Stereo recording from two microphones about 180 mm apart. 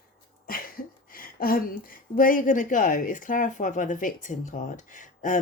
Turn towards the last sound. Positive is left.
turn(degrees=45)  # may be behind; listen again after turning